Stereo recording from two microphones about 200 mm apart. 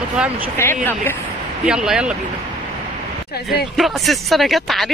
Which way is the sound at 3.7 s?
Centre (ahead or behind).